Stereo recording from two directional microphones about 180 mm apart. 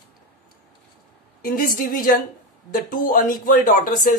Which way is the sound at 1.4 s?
55° left (ahead or behind).